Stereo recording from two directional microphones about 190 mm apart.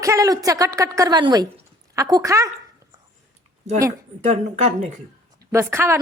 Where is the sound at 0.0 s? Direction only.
15° right (ahead or behind).